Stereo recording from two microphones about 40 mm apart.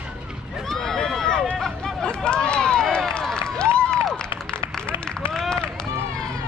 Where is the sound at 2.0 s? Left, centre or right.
Left.